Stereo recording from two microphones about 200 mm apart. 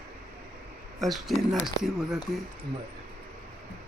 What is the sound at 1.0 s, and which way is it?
Speech, centre (ahead or behind).